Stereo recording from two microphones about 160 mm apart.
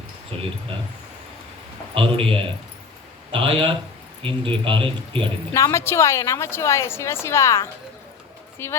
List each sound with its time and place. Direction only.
0.3 s speech: 35° right (ahead or behind)
2.0 s speech: 35° right (ahead or behind)
5.5 s a woman's voice: 20° left (ahead or behind)